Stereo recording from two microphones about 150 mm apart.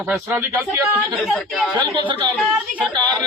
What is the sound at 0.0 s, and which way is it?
Speech, 15° right (ahead or behind).